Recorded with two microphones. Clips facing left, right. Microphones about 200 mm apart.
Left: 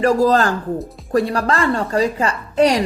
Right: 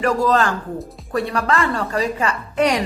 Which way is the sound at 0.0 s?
35° left (ahead or behind).